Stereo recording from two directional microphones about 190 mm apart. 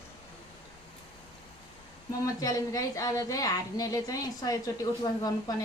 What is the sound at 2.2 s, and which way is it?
Speech, 20° left (ahead or behind).